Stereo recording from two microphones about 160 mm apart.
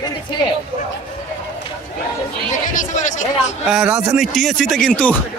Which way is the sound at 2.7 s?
50° left (ahead or behind).